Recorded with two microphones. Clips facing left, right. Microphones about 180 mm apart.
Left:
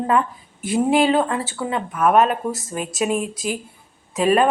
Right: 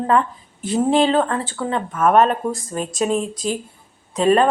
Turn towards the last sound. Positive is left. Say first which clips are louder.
# right 2 dB
turn(degrees=10)  # may be behind; listen again after turning